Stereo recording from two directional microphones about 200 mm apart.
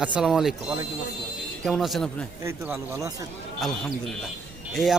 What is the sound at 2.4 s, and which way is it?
Speech, 15° right (ahead or behind).